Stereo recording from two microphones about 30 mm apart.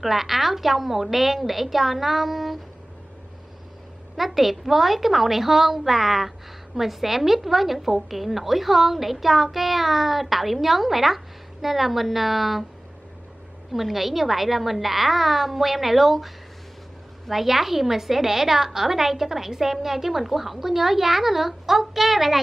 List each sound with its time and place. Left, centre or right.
0.0 s a woman's voice: centre
4.2 s a woman's voice: centre
13.7 s a woman's voice: centre
17.3 s a woman's voice: centre